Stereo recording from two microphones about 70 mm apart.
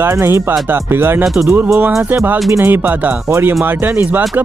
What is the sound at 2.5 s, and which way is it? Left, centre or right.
Speech, right.